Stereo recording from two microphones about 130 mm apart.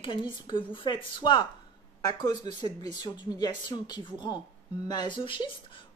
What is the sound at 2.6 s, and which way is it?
Speech, 30° left (ahead or behind).